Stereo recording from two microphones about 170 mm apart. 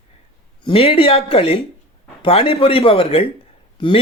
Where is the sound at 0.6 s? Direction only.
35° left (ahead or behind).